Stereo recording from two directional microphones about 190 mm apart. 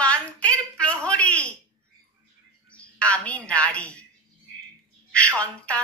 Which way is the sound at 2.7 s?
5° left (ahead or behind).